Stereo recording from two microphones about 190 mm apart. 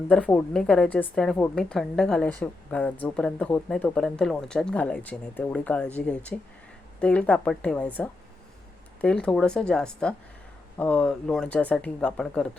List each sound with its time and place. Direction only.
0.1 s a woman's voice: 5° left (ahead or behind)